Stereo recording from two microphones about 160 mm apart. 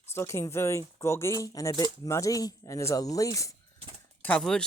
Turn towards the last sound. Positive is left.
turn(degrees=5)  # may be behind; listen again after turning